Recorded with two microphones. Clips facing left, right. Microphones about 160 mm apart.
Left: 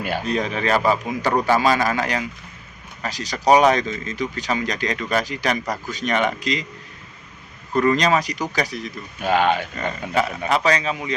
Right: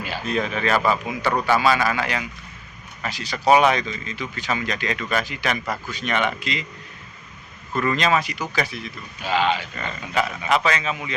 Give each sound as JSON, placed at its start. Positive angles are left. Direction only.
{"t": 0.3, "sound": "speech", "side_deg": 35}
{"t": 7.7, "sound": "speech", "side_deg": 40}
{"t": 10.5, "sound": "speech", "side_deg": 35}